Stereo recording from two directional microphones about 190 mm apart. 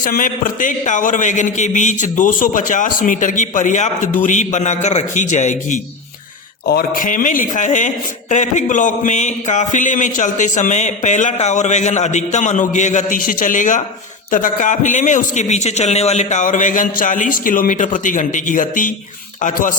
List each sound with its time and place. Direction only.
0.0 s a man's voice: 45° left (ahead or behind)